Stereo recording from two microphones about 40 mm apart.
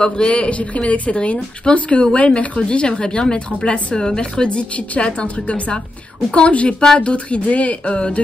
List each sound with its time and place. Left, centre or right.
0.0 s speech: left